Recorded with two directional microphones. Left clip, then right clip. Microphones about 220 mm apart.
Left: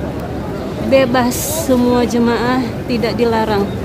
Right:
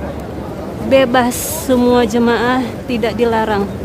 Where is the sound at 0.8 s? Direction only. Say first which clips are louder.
Right 1 dB; 10° right (ahead or behind).